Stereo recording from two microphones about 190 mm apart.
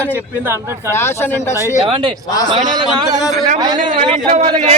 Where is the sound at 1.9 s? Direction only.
25° right (ahead or behind).